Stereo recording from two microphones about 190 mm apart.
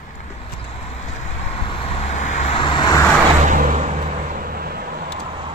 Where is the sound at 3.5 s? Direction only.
40° right (ahead or behind).